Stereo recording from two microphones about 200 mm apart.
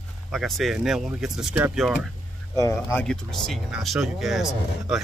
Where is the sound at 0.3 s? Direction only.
Centre (ahead or behind).